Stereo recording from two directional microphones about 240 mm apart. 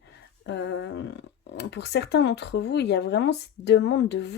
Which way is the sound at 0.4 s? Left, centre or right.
Left.